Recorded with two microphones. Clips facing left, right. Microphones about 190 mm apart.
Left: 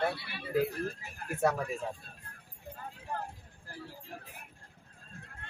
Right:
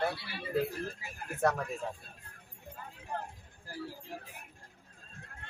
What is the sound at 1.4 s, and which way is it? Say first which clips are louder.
Speech: left 1 dB; 10° left (ahead or behind).